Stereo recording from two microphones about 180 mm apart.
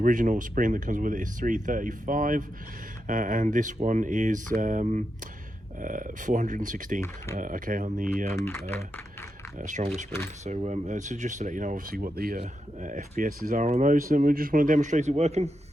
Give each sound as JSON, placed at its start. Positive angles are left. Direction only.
{"t": 0.0, "sound": "speech", "side_deg": -45}
{"t": 8.4, "sound": "speech", "side_deg": 15}
{"t": 9.6, "sound": "speech", "side_deg": -45}
{"t": 12.4, "sound": "speech", "side_deg": -45}